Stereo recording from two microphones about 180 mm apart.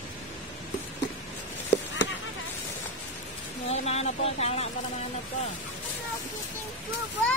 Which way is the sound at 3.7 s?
35° left (ahead or behind).